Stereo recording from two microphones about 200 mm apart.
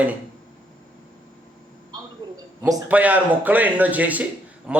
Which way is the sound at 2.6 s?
15° right (ahead or behind).